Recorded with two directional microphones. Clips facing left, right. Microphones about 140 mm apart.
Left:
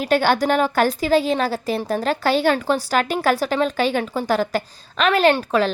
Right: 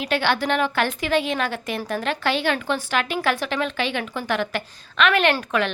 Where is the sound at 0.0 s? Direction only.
40° left (ahead or behind).